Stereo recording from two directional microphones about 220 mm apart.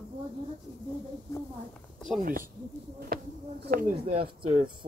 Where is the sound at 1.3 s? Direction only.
5° left (ahead or behind).